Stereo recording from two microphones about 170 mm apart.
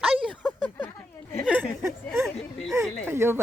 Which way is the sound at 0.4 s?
10° left (ahead or behind).